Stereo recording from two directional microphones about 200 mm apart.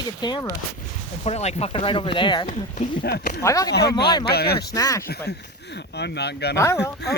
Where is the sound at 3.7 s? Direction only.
55° left (ahead or behind).